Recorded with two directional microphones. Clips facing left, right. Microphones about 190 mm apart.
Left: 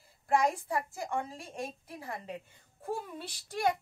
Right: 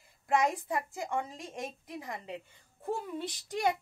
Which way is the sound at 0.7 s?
15° right (ahead or behind).